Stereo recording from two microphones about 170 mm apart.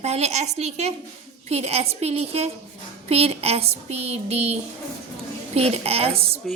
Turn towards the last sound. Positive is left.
turn(degrees=-35)  # may be behind; listen again after turning